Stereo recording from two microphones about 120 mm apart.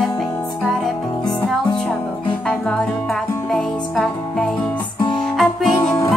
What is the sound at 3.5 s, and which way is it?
Music, 5° left (ahead or behind).